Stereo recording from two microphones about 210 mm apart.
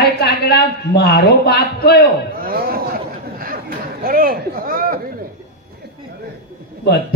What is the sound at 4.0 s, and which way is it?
A man's voice, 45° right (ahead or behind).